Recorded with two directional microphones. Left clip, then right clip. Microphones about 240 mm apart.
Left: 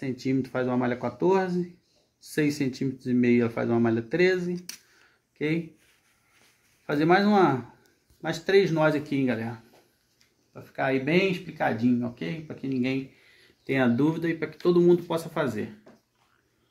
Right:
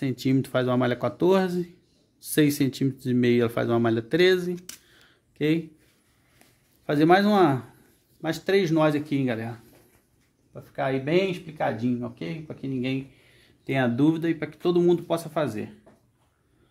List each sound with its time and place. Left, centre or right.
0.0 s speech: right
6.9 s speech: right
10.5 s speech: right